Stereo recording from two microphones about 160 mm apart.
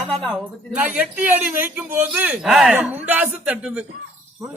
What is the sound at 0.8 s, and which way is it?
A man's voice, 10° right (ahead or behind).